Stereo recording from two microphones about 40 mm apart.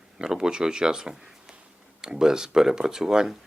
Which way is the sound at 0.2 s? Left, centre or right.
Centre.